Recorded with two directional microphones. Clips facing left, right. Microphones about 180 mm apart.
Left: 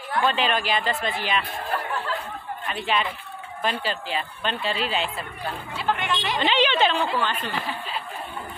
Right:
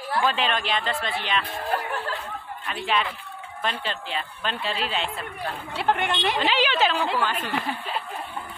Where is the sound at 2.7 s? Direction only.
Centre (ahead or behind).